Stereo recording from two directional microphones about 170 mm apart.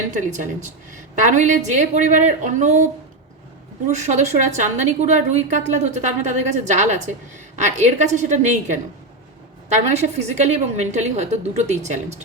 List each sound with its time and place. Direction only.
0.1 s a woman's voice: 45° right (ahead or behind)
3.9 s a woman's voice: 45° right (ahead or behind)